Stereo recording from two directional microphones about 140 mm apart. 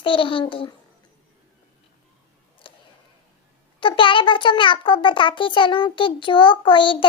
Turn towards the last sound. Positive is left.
turn(degrees=35)  # may be behind; listen again after turning